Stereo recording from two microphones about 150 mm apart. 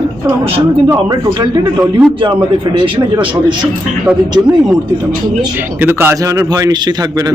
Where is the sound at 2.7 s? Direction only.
35° right (ahead or behind).